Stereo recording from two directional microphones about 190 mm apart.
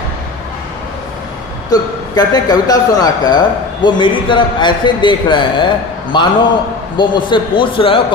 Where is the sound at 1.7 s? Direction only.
20° left (ahead or behind).